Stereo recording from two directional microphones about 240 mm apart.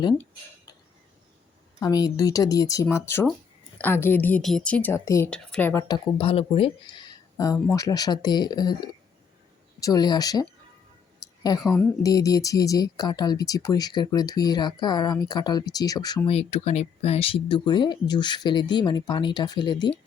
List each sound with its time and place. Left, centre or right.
1.8 s speech: centre
11.6 s a woman's voice: centre
12.0 s speech: centre